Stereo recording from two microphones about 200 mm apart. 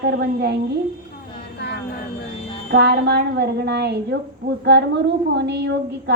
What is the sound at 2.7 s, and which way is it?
A woman's voice, 55° right (ahead or behind).